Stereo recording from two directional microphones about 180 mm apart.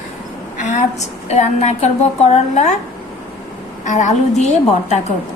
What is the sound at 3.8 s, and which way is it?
A woman's voice, 45° left (ahead or behind).